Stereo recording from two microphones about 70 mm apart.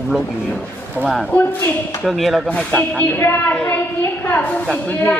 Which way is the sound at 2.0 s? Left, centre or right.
Centre.